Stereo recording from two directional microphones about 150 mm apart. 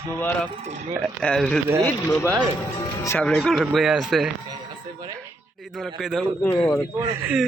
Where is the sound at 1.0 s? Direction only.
5° left (ahead or behind).